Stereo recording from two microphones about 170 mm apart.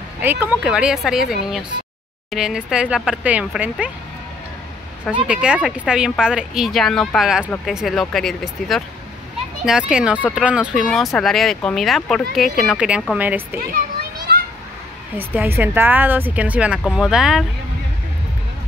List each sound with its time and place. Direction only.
0.2 s speech: 10° right (ahead or behind)
5.2 s speech: 5° right (ahead or behind)
13.7 s children playing: 55° right (ahead or behind)
15.1 s speech: 10° right (ahead or behind)